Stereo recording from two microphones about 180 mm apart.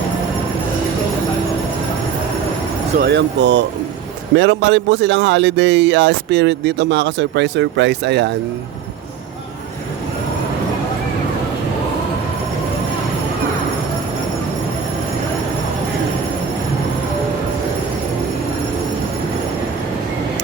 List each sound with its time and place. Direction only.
3.0 s speech: 75° right (ahead or behind)